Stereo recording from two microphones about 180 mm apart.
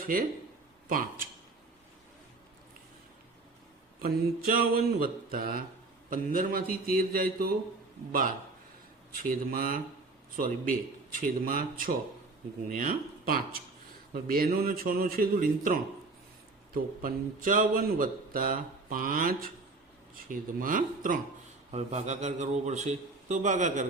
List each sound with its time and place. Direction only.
0.0 s a man's voice: 50° right (ahead or behind)
4.0 s speech: 55° right (ahead or behind)
9.5 s speech: 50° right (ahead or behind)
21.7 s a man's voice: 40° right (ahead or behind)